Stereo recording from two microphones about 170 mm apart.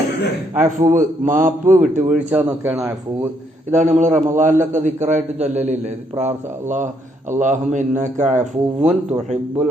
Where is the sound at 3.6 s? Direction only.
45° right (ahead or behind).